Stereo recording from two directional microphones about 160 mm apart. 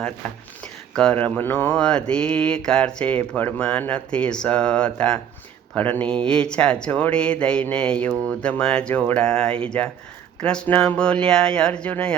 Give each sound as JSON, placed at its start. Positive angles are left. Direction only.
{"t": 0.9, "sound": "mantra", "side_deg": 10}
{"t": 8.3, "sound": "speech", "side_deg": 5}
{"t": 9.6, "sound": "mantra", "side_deg": 5}
{"t": 10.4, "sound": "speech", "side_deg": 5}